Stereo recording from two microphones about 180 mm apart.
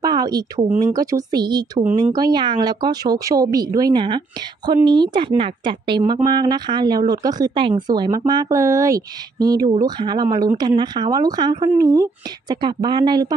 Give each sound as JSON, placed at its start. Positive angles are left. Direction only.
{"t": 0.0, "sound": "speech", "side_deg": -20}